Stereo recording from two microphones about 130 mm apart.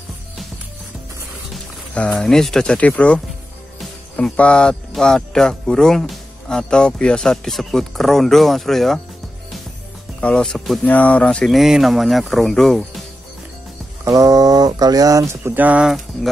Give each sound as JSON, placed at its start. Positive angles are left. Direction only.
{"t": 1.5, "sound": "speech", "side_deg": 5}
{"t": 4.2, "sound": "speech", "side_deg": 10}
{"t": 10.2, "sound": "speech", "side_deg": 5}
{"t": 14.0, "sound": "a sound", "side_deg": -25}